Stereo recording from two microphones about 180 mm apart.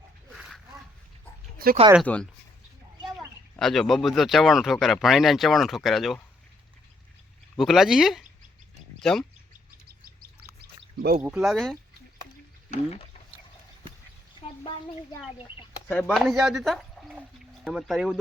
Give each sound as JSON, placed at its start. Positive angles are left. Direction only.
{"t": 0.3, "sound": "a sound", "side_deg": 0}
{"t": 1.5, "sound": "speech", "side_deg": -55}
{"t": 2.0, "sound": "speech", "side_deg": 5}
{"t": 3.6, "sound": "speech", "side_deg": 0}
{"t": 7.6, "sound": "speech", "side_deg": 0}
{"t": 10.9, "sound": "speech", "side_deg": -60}
{"t": 11.2, "sound": "speech", "side_deg": -5}
{"t": 12.7, "sound": "speech", "side_deg": 35}
{"t": 15.9, "sound": "speech", "side_deg": 5}